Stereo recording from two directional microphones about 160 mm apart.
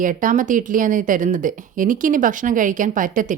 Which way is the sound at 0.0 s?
55° right (ahead or behind).